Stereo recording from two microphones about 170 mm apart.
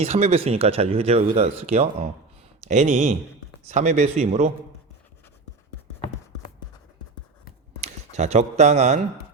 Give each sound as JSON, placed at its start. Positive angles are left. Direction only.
{"t": 0.0, "sound": "speech", "side_deg": -40}
{"t": 7.8, "sound": "speech", "side_deg": -40}